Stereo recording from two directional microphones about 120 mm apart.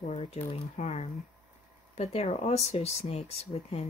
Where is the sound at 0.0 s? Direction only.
55° left (ahead or behind).